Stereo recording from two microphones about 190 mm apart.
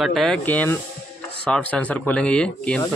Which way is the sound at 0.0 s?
Centre (ahead or behind).